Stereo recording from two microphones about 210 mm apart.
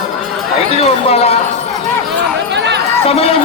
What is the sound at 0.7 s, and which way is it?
Speech, 30° left (ahead or behind).